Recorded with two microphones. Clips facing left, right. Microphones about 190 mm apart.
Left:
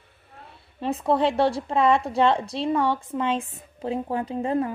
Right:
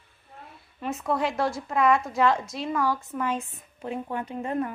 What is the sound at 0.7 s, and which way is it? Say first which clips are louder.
A woman's voice: left 5 dB; 30° left (ahead or behind).